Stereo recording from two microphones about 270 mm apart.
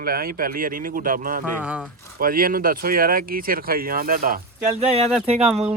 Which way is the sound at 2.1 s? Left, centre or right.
Right.